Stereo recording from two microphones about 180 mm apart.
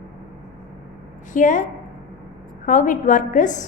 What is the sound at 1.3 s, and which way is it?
Speech, 45° left (ahead or behind).